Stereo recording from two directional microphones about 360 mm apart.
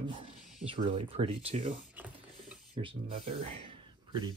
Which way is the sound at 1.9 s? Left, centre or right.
Centre.